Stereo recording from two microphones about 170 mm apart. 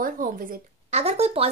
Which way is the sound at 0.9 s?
40° right (ahead or behind).